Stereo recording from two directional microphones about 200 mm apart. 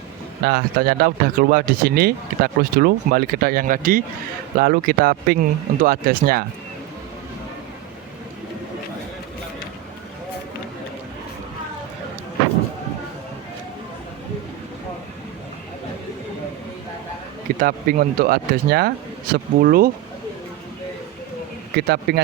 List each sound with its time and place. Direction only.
0.4 s speech: 50° right (ahead or behind)
17.6 s speech: 45° right (ahead or behind)
21.8 s speech: 55° right (ahead or behind)